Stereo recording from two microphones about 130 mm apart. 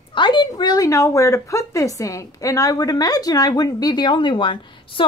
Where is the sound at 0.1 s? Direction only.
35° left (ahead or behind).